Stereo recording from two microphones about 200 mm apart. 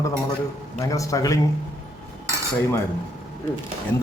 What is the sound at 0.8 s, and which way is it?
Speech, 15° left (ahead or behind).